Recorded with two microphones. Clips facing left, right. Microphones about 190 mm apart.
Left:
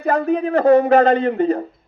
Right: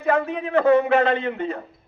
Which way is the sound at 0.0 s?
40° left (ahead or behind).